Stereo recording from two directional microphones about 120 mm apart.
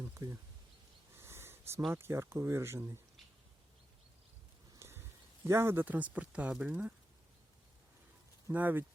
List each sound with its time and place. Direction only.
0.1 s a sound: 25° right (ahead or behind)
1.1 s wheeze: 20° right (ahead or behind)
1.9 s speech: 20° right (ahead or behind)
4.8 s a sound: 20° right (ahead or behind)
5.5 s speech: 20° right (ahead or behind)
8.4 s speech: 15° right (ahead or behind)